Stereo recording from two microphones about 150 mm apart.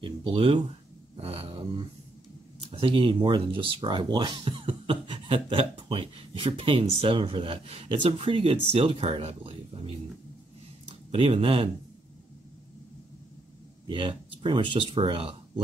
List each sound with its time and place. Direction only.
0.0 s speech: 35° right (ahead or behind)
1.1 s a sound: 40° right (ahead or behind)
2.6 s speech: 35° right (ahead or behind)
11.1 s speech: 35° right (ahead or behind)
13.8 s speech: 35° right (ahead or behind)